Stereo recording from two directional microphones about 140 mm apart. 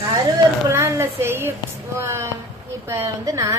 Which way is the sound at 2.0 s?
20° right (ahead or behind).